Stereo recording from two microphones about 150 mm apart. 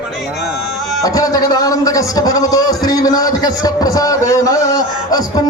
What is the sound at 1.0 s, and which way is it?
A man's voice, 25° left (ahead or behind).